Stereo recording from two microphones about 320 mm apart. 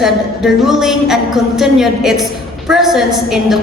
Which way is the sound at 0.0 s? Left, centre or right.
Centre.